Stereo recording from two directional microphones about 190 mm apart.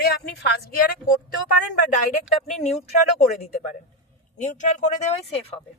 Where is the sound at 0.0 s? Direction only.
60° left (ahead or behind).